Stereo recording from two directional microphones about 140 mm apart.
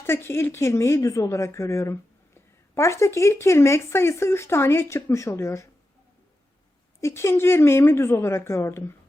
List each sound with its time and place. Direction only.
0.0 s speech: 15° left (ahead or behind)
7.0 s speech: 20° left (ahead or behind)